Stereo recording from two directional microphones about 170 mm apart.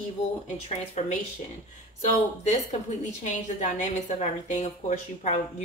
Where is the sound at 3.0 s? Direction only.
45° left (ahead or behind).